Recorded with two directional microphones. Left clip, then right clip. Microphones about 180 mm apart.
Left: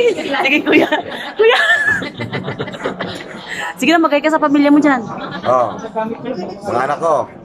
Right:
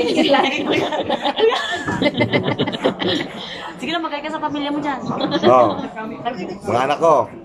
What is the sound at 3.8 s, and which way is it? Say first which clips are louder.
A woman's voice: left 12 dB; 60° left (ahead or behind).